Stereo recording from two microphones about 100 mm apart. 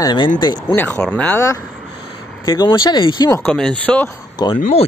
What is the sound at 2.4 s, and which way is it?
Speech, 45° left (ahead or behind).